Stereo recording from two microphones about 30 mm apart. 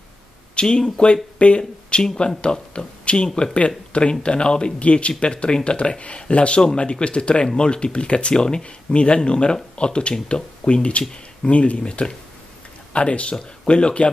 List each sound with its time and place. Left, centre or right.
0.6 s speech: left
4.7 s speech: left
8.4 s speech: left
8.6 s speech: left
11.8 s speech: left